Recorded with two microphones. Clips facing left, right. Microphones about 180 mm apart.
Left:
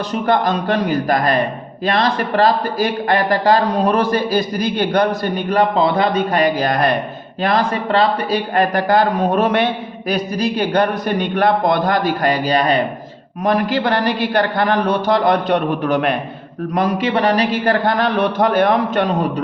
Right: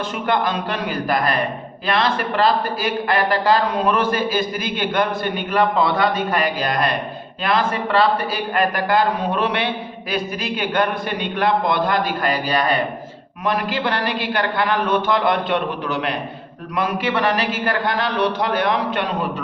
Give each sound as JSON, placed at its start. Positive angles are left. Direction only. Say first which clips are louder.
{"t": 0.1, "sound": "a man's voice", "louder": "left 6 dB", "side_deg": 40}
{"t": 13.4, "sound": "a man's voice", "louder": "left 5 dB", "side_deg": 45}
{"t": 16.7, "sound": "a man's voice", "louder": "left 4 dB", "side_deg": 35}